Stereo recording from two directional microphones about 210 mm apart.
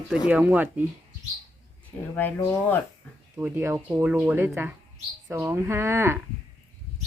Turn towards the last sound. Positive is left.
turn(degrees=-10)  # may be behind; listen again after turning